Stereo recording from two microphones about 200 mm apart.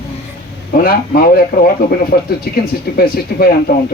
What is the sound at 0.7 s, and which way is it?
Speech, 45° left (ahead or behind).